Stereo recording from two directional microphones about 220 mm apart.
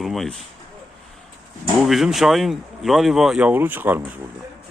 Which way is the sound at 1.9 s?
Centre (ahead or behind).